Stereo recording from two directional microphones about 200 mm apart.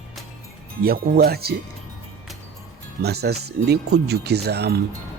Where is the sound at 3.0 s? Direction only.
55° right (ahead or behind).